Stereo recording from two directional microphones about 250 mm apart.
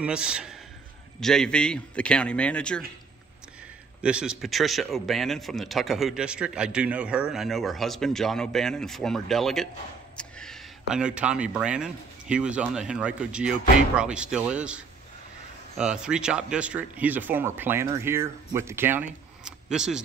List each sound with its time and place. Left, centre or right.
0.0 s a man's voice: centre
4.0 s a man's voice: centre
19.4 s camera: centre